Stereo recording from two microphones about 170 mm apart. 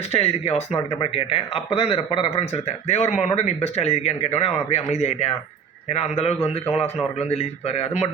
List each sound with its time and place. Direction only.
0.1 s speech: 35° left (ahead or behind)